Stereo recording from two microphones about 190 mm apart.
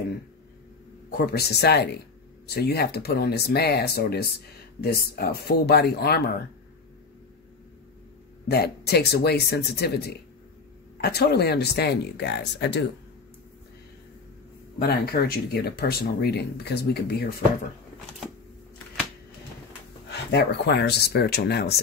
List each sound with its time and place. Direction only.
1.1 s speech: 55° left (ahead or behind)
8.5 s speech: 60° left (ahead or behind)
14.8 s speech: 55° left (ahead or behind)
20.1 s speech: 60° left (ahead or behind)